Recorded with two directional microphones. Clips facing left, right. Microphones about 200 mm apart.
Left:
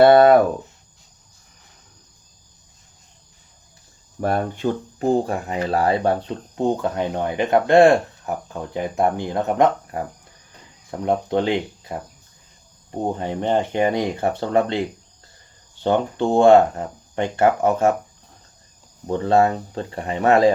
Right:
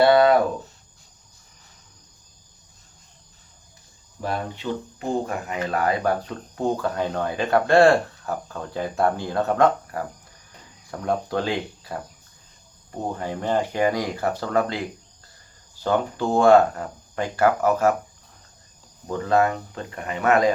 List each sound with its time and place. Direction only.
0.0 s speech: 50° left (ahead or behind)
4.2 s speech: 50° left (ahead or behind)
5.0 s speech: 35° left (ahead or behind)
13.1 s speech: 25° left (ahead or behind)
19.0 s speech: 30° left (ahead or behind)